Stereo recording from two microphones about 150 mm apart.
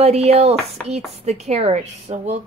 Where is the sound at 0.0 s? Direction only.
45° right (ahead or behind).